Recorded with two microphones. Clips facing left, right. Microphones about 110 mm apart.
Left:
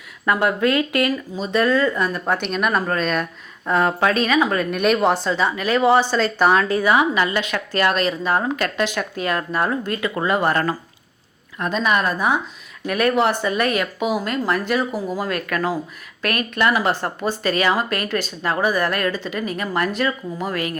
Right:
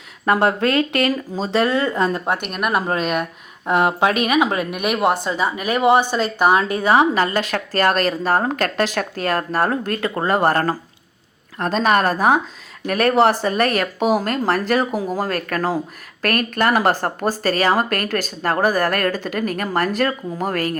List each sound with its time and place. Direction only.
0.3 s speech: 35° right (ahead or behind)
2.5 s speech: 5° right (ahead or behind)
2.8 s speech: 20° right (ahead or behind)
6.8 s speech: 35° right (ahead or behind)